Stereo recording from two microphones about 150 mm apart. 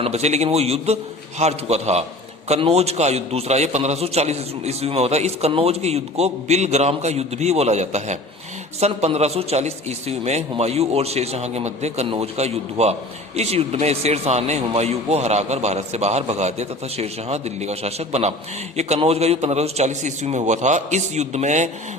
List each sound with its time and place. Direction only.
0.0 s a man's voice: 45° right (ahead or behind)